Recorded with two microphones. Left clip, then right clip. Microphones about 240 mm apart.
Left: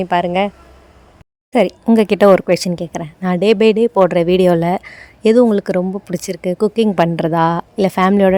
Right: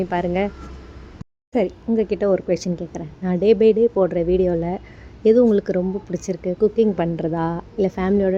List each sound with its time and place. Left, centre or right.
0.0 s speech: left
1.5 s speech: left